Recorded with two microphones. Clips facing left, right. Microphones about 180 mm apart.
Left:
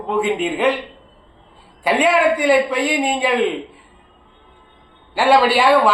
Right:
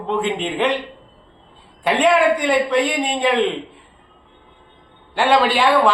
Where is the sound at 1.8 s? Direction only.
5° left (ahead or behind).